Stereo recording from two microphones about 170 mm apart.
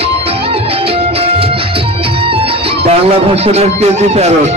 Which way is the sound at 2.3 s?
35° right (ahead or behind).